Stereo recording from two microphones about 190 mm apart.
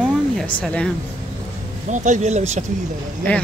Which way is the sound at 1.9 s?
40° right (ahead or behind).